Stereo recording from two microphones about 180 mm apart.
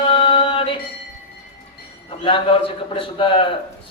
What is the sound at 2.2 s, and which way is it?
A man's voice, 30° left (ahead or behind).